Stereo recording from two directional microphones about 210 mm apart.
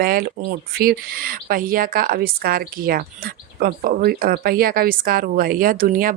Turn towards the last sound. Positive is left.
turn(degrees=-40)  # may be behind; listen again after turning